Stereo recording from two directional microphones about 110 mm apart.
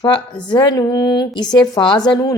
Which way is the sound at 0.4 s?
40° left (ahead or behind).